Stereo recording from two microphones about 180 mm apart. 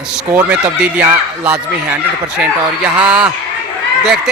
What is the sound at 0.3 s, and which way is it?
Speech, 5° right (ahead or behind).